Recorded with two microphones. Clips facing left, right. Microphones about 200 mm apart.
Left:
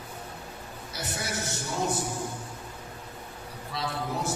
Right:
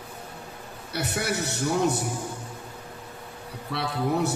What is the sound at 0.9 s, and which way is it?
A man's voice, 65° right (ahead or behind).